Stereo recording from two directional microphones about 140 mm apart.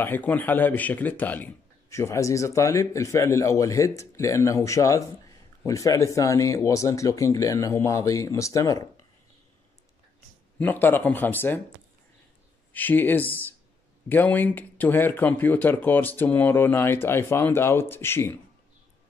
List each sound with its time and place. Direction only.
0.0 s speech: 15° left (ahead or behind)
10.6 s speech: 15° left (ahead or behind)
12.7 s speech: 15° left (ahead or behind)